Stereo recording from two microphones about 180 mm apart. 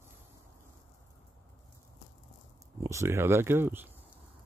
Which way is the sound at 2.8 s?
15° right (ahead or behind).